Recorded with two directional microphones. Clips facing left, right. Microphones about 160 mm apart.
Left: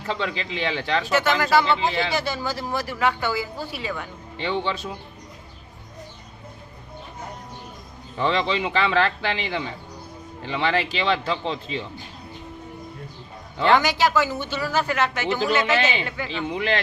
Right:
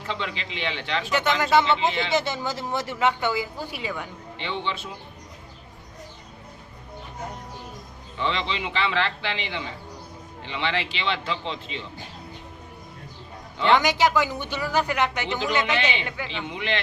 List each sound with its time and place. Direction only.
0.1 s a man's voice: 40° left (ahead or behind)
1.1 s speech: 20° right (ahead or behind)
4.4 s a man's voice: 40° left (ahead or behind)
8.2 s a man's voice: 40° left (ahead or behind)
13.7 s a woman's voice: 20° right (ahead or behind)
15.7 s a man's voice: 40° left (ahead or behind)